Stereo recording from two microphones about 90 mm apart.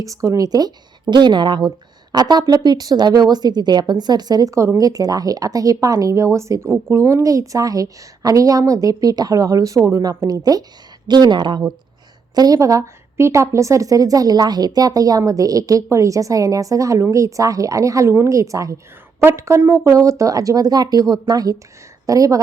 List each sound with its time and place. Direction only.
0.0 s a woman's voice: 40° right (ahead or behind)
1.1 s a woman's voice: 55° right (ahead or behind)
2.1 s a woman's voice: 50° right (ahead or behind)
11.1 s a woman's voice: 55° right (ahead or behind)
12.3 s speech: 45° right (ahead or behind)
12.5 s a woman's voice: 35° right (ahead or behind)